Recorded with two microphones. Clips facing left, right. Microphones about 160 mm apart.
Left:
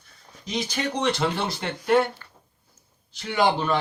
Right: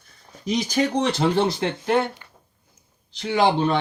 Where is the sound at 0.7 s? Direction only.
35° right (ahead or behind).